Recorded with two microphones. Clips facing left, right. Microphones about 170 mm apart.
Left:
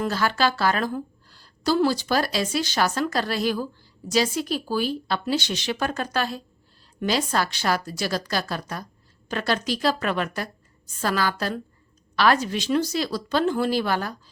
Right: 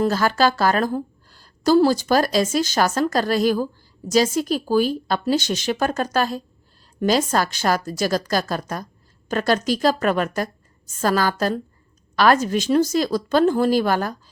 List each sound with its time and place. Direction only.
0.0 s a woman's voice: 40° right (ahead or behind)